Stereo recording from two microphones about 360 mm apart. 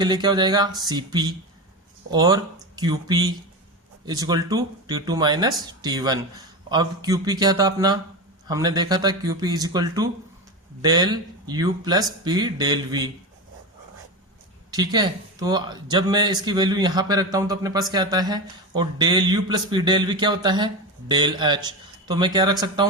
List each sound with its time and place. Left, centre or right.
0.0 s speech: centre
14.7 s speech: centre